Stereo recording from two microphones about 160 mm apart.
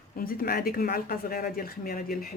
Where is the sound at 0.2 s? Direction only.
65° left (ahead or behind).